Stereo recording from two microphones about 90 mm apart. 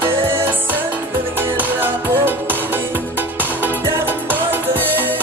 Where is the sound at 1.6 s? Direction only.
20° right (ahead or behind).